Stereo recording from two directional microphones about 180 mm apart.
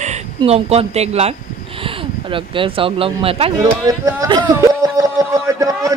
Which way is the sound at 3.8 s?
20° right (ahead or behind).